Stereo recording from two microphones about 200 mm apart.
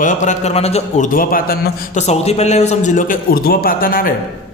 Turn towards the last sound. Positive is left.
turn(degrees=45)  # may be behind; listen again after turning